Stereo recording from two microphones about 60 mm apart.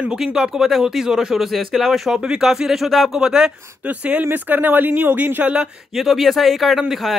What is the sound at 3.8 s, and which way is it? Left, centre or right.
Speech, right.